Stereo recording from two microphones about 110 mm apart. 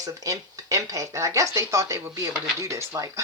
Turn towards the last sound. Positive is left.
turn(degrees=-30)  # may be behind; listen again after turning